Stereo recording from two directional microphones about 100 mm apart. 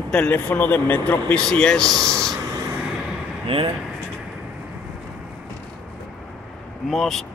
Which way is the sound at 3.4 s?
65° right (ahead or behind).